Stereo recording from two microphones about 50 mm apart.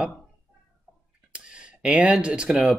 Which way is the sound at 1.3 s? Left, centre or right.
Right.